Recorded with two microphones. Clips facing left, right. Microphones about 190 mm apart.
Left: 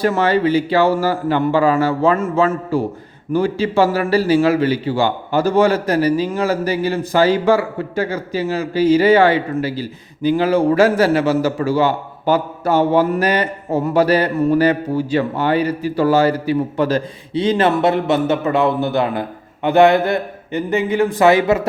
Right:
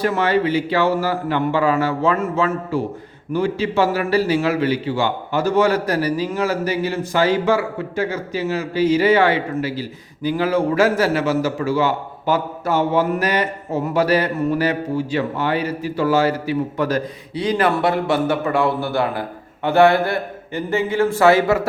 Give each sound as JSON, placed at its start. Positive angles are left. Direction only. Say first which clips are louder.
{"t": 0.0, "sound": "a man's voice", "louder": "left 3 dB", "side_deg": 35}